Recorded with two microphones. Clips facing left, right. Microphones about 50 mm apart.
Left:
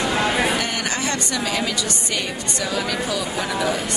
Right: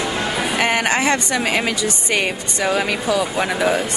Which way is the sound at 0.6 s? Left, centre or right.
Right.